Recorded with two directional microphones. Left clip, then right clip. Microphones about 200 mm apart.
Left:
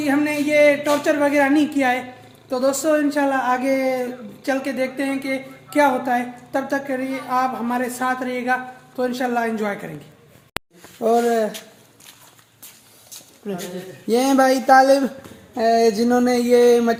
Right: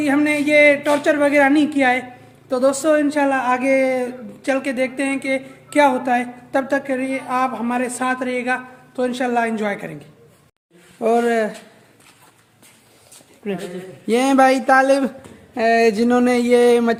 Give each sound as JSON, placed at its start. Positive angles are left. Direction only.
{"t": 0.0, "sound": "speech", "side_deg": -5}
{"t": 11.0, "sound": "speech", "side_deg": 0}
{"t": 14.1, "sound": "speech", "side_deg": -5}
{"t": 15.5, "sound": "a sound", "side_deg": -25}